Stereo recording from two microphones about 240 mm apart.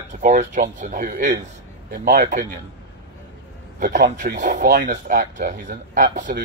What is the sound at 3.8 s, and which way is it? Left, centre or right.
Speech, right.